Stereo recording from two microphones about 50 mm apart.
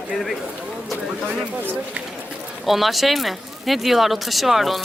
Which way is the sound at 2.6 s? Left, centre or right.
Centre.